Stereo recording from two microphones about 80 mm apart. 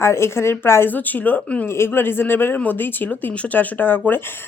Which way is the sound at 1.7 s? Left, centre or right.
Left.